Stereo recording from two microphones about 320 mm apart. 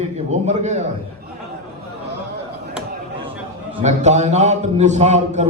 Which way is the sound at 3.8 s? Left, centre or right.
Right.